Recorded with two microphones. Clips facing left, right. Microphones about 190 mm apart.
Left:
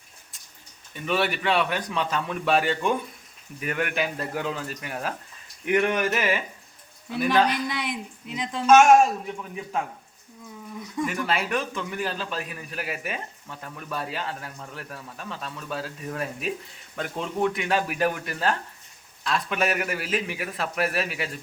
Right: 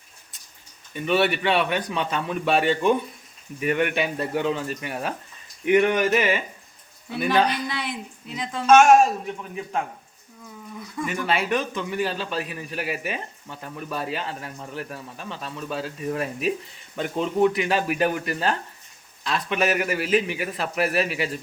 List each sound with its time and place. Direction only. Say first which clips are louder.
0.9 s a man's voice: right 4 dB; centre (ahead or behind)
7.7 s a woman's voice: even; 15° left (ahead or behind)
8.6 s a man's voice: right 1 dB; 5° left (ahead or behind)
11.0 s a man's voice: right 2 dB; centre (ahead or behind)